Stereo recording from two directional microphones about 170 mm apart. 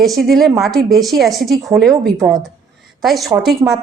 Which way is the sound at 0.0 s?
Centre (ahead or behind).